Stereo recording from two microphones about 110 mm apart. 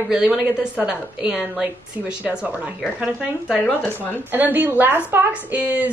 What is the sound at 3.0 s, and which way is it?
A woman's voice, 10° right (ahead or behind).